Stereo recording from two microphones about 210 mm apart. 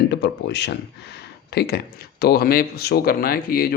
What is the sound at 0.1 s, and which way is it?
Speech, 55° left (ahead or behind).